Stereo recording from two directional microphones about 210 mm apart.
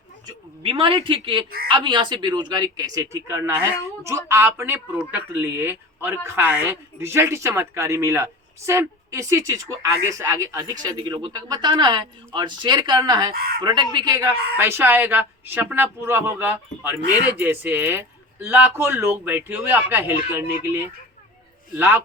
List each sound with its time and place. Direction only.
0.3 s a man's voice: 25° right (ahead or behind)
13.3 s speech: 45° right (ahead or behind)
13.6 s a man's voice: 20° right (ahead or behind)